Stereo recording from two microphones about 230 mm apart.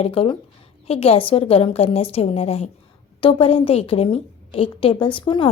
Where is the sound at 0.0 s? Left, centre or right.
Left.